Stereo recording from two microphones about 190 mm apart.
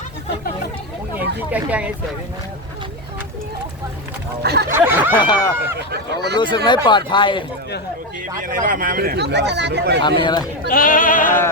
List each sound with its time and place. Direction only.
1.5 s speech: 10° right (ahead or behind)
4.7 s a sound: 10° right (ahead or behind)
5.2 s speech: 20° left (ahead or behind)
8.4 s speech: 45° right (ahead or behind); by 10.0 s 65° right (ahead or behind)
10.2 s speech: 25° left (ahead or behind)
10.7 s bleat: 45° left (ahead or behind)